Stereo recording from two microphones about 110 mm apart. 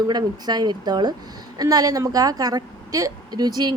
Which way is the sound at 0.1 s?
40° right (ahead or behind).